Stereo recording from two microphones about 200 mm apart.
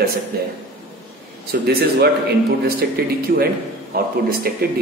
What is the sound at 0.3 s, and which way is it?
Speech, 50° right (ahead or behind).